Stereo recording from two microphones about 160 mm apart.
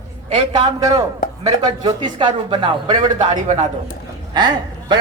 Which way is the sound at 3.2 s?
50° right (ahead or behind).